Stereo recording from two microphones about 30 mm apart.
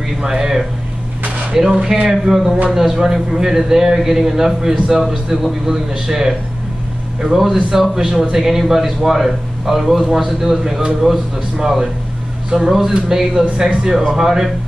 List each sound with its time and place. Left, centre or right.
0.2 s a man's voice: centre
11.1 s speech: centre
12.5 s a man's voice: centre
13.6 s speech: right
14.1 s a man's voice: centre